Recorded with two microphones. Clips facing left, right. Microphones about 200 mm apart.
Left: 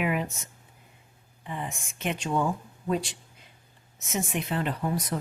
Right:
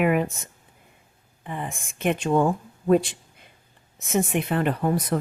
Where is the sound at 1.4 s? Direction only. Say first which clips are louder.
Right 3 dB; 55° right (ahead or behind).